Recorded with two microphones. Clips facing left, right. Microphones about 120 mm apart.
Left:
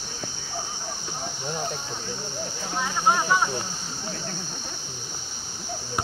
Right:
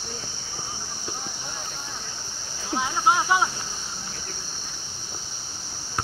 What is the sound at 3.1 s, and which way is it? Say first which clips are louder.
Speech: right 1 dB; 10° right (ahead or behind).